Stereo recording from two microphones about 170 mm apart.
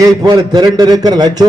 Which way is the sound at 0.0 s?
25° right (ahead or behind).